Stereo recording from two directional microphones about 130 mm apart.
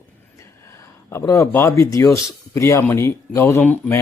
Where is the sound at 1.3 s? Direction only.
20° left (ahead or behind).